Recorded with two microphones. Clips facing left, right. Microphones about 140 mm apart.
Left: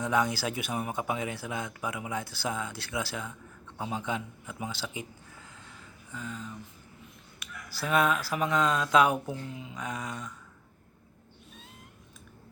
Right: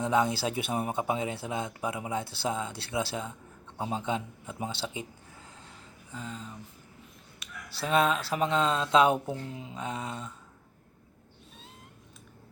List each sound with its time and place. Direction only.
0.0 s speech: 25° right (ahead or behind)
6.1 s speech: 30° right (ahead or behind)